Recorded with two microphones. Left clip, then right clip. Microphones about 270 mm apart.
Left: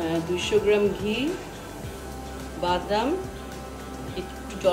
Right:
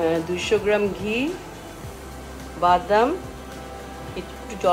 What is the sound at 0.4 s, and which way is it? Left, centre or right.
Speech, right.